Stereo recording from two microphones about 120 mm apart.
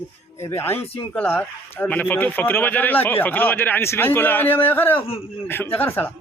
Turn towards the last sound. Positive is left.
turn(degrees=15)  # may be behind; listen again after turning